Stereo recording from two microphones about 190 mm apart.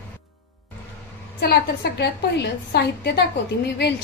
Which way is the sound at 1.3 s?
60° left (ahead or behind).